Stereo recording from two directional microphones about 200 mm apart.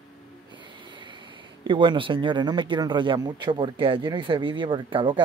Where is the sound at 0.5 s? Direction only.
25° right (ahead or behind).